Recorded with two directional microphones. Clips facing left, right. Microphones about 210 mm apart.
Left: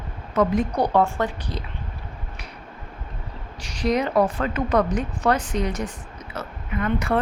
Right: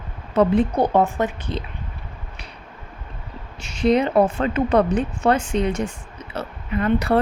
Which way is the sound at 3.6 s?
25° right (ahead or behind).